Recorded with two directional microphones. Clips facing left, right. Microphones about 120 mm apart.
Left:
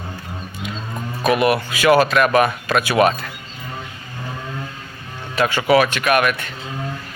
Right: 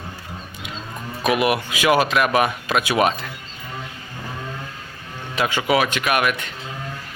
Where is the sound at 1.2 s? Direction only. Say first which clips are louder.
Left 3 dB; 15° right (ahead or behind).